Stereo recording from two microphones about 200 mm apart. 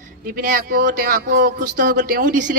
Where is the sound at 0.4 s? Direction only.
45° right (ahead or behind).